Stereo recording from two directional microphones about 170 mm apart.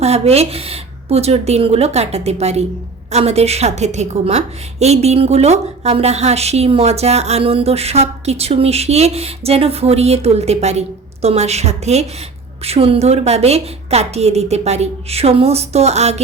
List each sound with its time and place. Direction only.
0.0 s a woman's voice: 40° right (ahead or behind)